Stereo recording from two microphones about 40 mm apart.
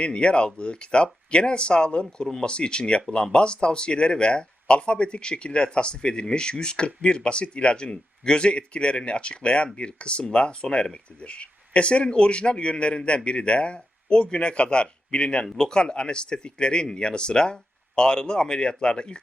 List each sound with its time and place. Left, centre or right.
0.0 s speech: left